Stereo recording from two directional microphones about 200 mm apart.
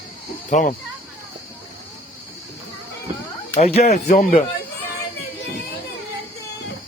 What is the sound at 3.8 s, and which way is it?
Speech, 50° left (ahead or behind).